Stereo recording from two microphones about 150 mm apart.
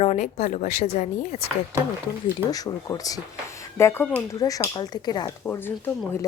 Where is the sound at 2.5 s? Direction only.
25° left (ahead or behind).